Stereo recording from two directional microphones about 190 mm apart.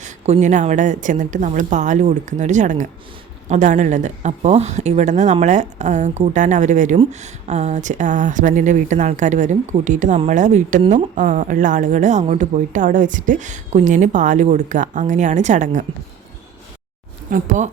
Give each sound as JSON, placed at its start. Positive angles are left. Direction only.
{"t": 0.0, "sound": "speech", "side_deg": -40}
{"t": 17.3, "sound": "speech", "side_deg": -40}